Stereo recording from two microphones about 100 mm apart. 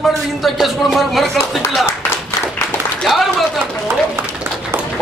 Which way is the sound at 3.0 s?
Centre (ahead or behind).